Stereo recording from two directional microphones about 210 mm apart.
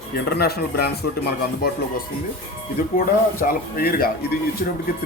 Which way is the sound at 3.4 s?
45° left (ahead or behind).